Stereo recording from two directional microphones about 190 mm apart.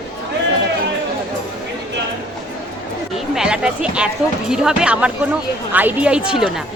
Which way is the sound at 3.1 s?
5° right (ahead or behind).